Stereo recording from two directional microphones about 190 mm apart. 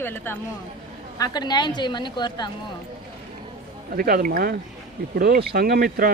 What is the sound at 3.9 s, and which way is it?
Speech, 50° right (ahead or behind).